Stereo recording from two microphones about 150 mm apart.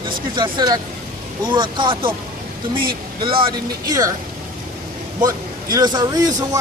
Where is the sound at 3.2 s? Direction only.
35° right (ahead or behind).